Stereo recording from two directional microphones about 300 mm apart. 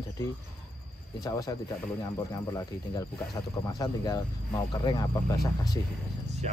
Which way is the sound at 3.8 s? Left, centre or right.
Centre.